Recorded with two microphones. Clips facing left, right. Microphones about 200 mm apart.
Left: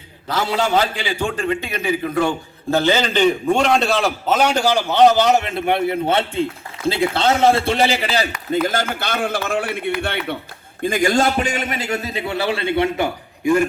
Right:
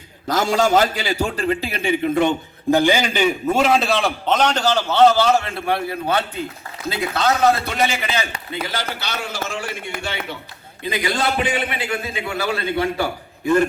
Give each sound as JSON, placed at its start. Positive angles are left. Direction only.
{"t": 0.3, "sound": "a man's voice", "side_deg": -45}
{"t": 8.4, "sound": "a man's voice", "side_deg": 45}
{"t": 10.8, "sound": "a man's voice", "side_deg": 45}
{"t": 13.4, "sound": "a man's voice", "side_deg": 10}